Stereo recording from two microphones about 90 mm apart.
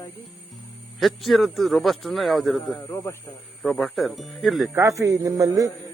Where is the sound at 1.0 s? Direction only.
Centre (ahead or behind).